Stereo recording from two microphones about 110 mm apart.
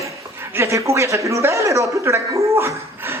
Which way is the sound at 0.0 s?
25° right (ahead or behind).